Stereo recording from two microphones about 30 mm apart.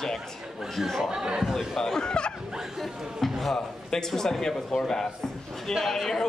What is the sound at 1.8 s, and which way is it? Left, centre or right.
Speech, left.